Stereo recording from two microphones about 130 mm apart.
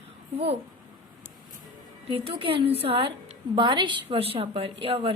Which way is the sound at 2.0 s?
45° right (ahead or behind).